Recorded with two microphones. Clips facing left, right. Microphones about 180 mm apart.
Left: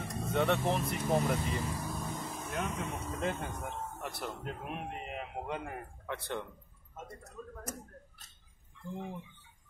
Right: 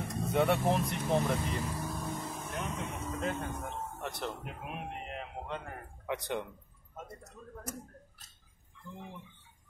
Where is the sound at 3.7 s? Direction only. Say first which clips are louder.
Right 1 dB; centre (ahead or behind).